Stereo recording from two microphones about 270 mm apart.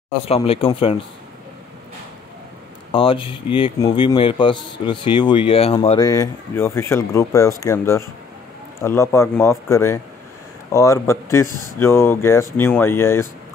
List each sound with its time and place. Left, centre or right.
0.3 s speech: left
2.9 s speech: centre